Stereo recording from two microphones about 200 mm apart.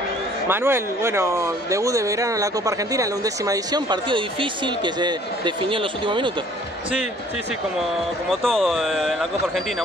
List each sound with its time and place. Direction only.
0.5 s speech: 10° right (ahead or behind)
8.3 s speech: centre (ahead or behind)